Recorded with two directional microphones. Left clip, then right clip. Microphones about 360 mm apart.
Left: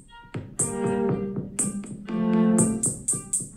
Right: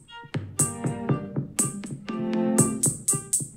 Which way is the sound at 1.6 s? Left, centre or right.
Right.